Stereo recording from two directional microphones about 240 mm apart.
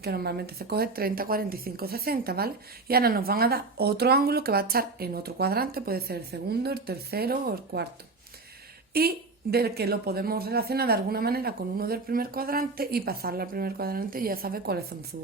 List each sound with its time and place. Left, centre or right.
0.0 s a woman's voice: right
8.9 s a woman's voice: right